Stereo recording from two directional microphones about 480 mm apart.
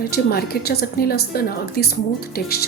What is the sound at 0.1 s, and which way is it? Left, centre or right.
A woman's voice, centre.